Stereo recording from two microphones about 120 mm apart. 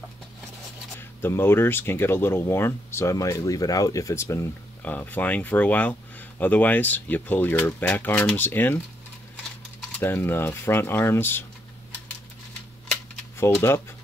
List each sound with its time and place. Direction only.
1.2 s speech: 20° left (ahead or behind)
9.9 s speech: 20° left (ahead or behind)
13.4 s speech: 20° left (ahead or behind)